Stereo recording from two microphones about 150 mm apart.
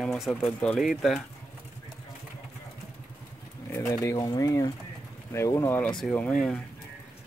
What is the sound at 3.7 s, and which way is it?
Speech, 20° left (ahead or behind).